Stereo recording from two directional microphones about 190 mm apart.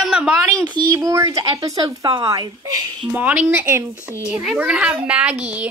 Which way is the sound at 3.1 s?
10° right (ahead or behind).